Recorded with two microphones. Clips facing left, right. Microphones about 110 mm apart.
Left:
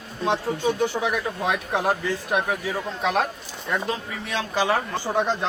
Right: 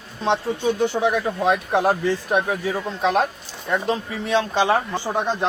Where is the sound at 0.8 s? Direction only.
30° right (ahead or behind).